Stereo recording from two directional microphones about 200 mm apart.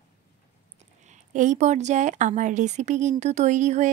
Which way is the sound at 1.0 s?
40° right (ahead or behind).